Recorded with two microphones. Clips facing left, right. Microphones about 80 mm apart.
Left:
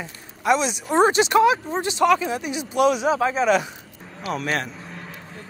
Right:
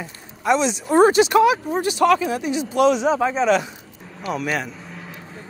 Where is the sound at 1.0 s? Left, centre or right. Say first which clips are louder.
Right 2 dB; left.